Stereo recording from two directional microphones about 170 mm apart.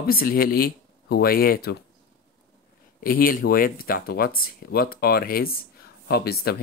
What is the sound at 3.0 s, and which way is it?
Speech, 60° left (ahead or behind).